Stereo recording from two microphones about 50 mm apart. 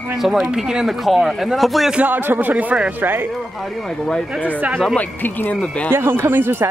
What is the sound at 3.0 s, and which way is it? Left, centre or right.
Speech, right.